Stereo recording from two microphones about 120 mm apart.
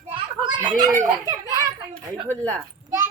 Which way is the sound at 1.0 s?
30° right (ahead or behind).